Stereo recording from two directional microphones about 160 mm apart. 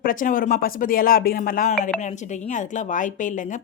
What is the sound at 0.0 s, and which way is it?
A woman's voice, 60° left (ahead or behind).